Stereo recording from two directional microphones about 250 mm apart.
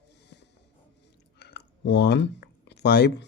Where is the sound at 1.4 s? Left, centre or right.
Left.